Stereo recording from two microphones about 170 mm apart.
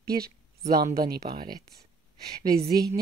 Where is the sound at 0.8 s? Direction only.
60° right (ahead or behind).